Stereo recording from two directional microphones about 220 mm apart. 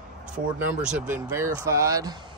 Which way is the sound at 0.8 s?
5° right (ahead or behind).